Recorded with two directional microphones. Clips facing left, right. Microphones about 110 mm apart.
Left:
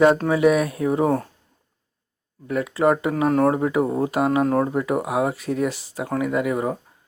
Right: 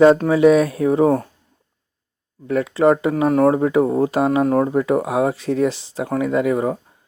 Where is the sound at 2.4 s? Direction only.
25° right (ahead or behind).